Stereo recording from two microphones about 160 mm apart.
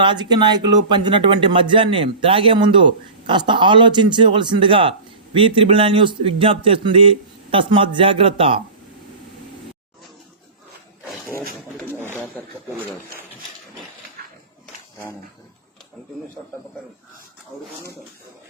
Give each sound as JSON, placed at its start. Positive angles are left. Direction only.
{"t": 0.0, "sound": "speech", "side_deg": -30}
{"t": 11.8, "sound": "pigeon", "side_deg": 10}
{"t": 17.5, "sound": "speech", "side_deg": 0}